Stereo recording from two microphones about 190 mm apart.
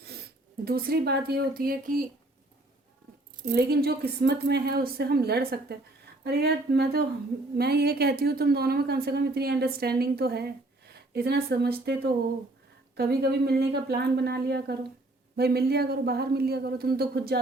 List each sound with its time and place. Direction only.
0.6 s speech: 50° right (ahead or behind)
3.5 s a woman's voice: 55° right (ahead or behind)